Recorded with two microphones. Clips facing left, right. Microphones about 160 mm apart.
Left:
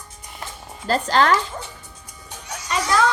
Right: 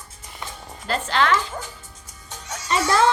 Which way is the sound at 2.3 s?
10° left (ahead or behind).